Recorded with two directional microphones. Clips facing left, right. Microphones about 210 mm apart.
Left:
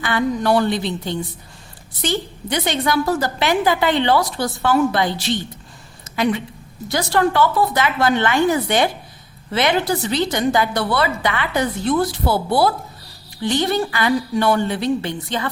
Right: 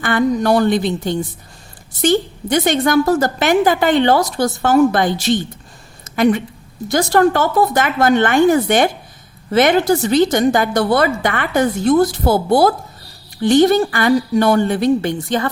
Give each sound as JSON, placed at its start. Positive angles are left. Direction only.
{"t": 0.0, "sound": "a woman's voice", "side_deg": -45}